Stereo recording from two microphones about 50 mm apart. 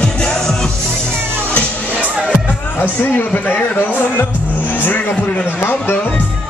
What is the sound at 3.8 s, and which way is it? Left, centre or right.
Music, left.